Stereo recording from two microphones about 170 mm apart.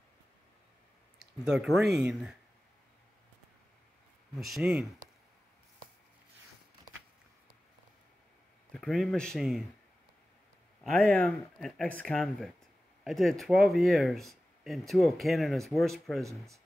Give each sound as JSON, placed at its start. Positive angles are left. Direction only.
{"t": 1.4, "sound": "speech", "side_deg": -5}
{"t": 4.4, "sound": "speech", "side_deg": 0}
{"t": 8.7, "sound": "speech", "side_deg": 0}
{"t": 10.8, "sound": "speech", "side_deg": 0}